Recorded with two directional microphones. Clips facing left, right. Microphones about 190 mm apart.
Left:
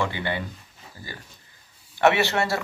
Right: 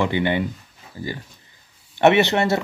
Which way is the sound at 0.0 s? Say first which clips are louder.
Right 7 dB; 20° right (ahead or behind).